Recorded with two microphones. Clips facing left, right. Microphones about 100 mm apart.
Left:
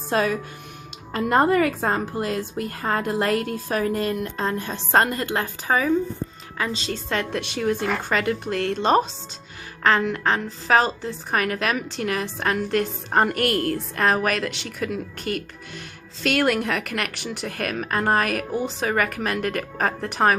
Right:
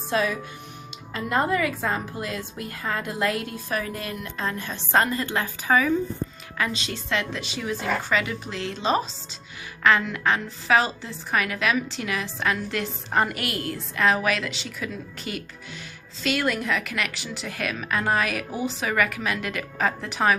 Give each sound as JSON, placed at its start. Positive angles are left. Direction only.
{"t": 0.1, "sound": "a woman's voice", "side_deg": 45}
{"t": 6.9, "sound": "a woman's voice", "side_deg": 45}
{"t": 10.0, "sound": "a woman's voice", "side_deg": 40}